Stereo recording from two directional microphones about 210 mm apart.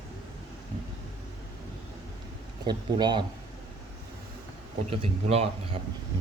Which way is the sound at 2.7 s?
20° right (ahead or behind).